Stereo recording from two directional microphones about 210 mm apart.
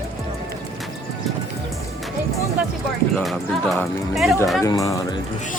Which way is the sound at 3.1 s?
5° left (ahead or behind).